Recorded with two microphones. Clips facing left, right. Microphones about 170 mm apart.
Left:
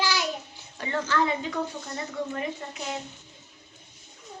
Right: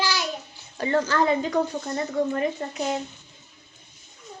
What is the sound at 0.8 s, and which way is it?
A woman's voice, 40° right (ahead or behind).